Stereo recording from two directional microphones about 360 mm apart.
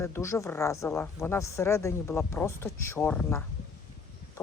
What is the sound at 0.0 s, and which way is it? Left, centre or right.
Speech, centre.